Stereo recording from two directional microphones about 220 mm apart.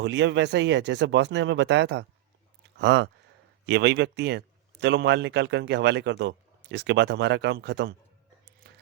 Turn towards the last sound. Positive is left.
turn(degrees=-50)  # may be behind; listen again after turning